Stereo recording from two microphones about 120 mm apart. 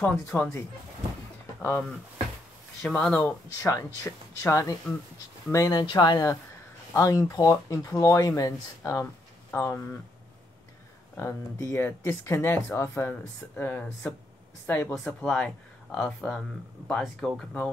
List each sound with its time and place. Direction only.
0.0 s speech: 15° left (ahead or behind)
2.8 s speech: 10° left (ahead or behind); by 9.9 s 25° left (ahead or behind)
11.1 s speech: 25° left (ahead or behind); by 17.4 s centre (ahead or behind)